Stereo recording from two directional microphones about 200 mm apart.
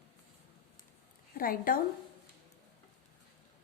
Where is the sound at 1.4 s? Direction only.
45° left (ahead or behind).